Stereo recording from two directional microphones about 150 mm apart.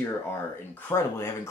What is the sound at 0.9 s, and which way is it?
Speech, 20° left (ahead or behind).